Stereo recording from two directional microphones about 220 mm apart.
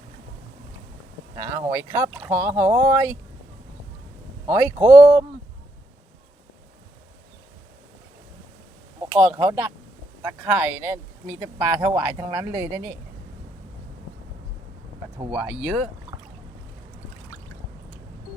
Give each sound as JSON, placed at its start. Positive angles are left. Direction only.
{"t": 1.4, "sound": "speech", "side_deg": -10}
{"t": 4.4, "sound": "speech", "side_deg": -10}
{"t": 9.4, "sound": "speech", "side_deg": -20}
{"t": 10.2, "sound": "speech", "side_deg": -10}
{"t": 15.3, "sound": "speech", "side_deg": -10}